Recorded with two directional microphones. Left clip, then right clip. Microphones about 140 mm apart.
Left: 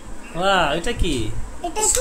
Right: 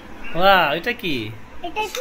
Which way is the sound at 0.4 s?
15° right (ahead or behind).